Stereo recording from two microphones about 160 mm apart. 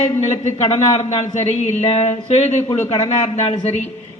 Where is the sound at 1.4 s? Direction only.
45° left (ahead or behind).